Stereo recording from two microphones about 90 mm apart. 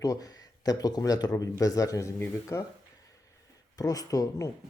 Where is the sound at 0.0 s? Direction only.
40° left (ahead or behind).